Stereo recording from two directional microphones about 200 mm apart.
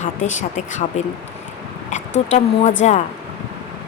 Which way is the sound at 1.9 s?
35° left (ahead or behind).